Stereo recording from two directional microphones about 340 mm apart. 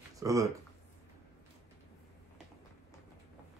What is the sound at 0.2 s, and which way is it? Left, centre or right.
Speech, centre.